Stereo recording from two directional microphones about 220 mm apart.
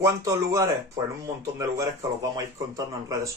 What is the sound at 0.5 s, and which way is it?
Speech, 15° right (ahead or behind).